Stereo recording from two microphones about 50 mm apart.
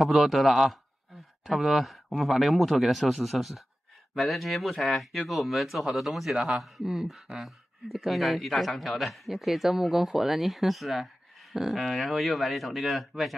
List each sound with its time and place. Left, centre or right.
0.0 s speech: centre
6.3 s a man's voice: centre
6.6 s speech: centre